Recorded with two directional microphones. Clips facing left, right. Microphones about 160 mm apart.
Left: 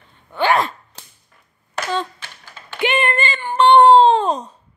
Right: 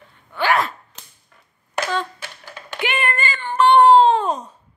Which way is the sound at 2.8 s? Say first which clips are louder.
Left 4 dB; 25° left (ahead or behind).